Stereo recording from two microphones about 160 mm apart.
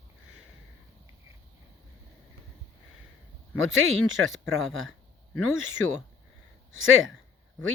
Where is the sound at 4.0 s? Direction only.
Centre (ahead or behind).